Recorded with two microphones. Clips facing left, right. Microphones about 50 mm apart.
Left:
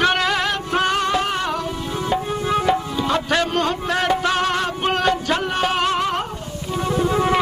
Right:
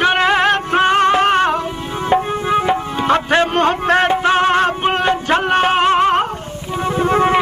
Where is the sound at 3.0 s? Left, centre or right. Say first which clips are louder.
Right 6 dB; right.